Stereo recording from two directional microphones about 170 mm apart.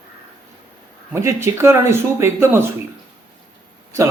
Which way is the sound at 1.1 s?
15° right (ahead or behind).